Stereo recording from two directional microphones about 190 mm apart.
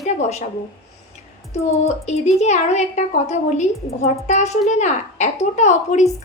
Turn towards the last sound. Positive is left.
turn(degrees=40)  # may be behind; listen again after turning